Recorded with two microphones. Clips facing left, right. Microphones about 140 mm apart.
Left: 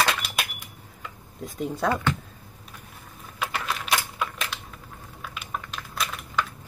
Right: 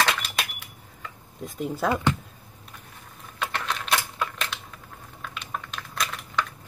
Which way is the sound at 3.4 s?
5° left (ahead or behind).